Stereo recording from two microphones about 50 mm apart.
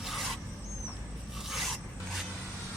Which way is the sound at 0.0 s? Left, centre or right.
Centre.